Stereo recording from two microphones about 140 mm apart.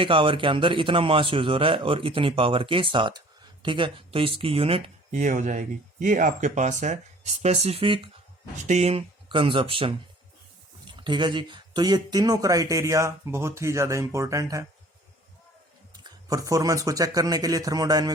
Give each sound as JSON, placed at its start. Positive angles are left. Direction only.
{"t": 0.0, "sound": "a man's voice", "side_deg": -40}
{"t": 5.1, "sound": "speech", "side_deg": -60}
{"t": 8.6, "sound": "a man's voice", "side_deg": -55}
{"t": 16.0, "sound": "speech", "side_deg": -25}